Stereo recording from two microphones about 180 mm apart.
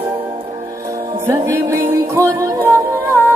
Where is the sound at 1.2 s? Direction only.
15° right (ahead or behind).